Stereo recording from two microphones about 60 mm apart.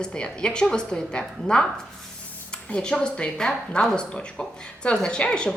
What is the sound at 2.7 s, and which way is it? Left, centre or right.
A woman's voice, centre.